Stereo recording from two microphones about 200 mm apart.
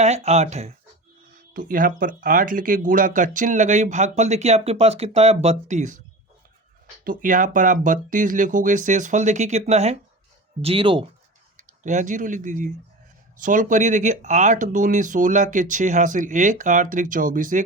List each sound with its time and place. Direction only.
0.0 s speech: 35° right (ahead or behind)
7.0 s speech: 45° right (ahead or behind); by 11.1 s 25° right (ahead or behind)
11.8 s speech: 40° right (ahead or behind)